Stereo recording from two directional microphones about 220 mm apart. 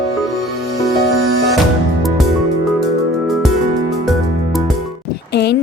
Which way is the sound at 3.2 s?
Centre (ahead or behind).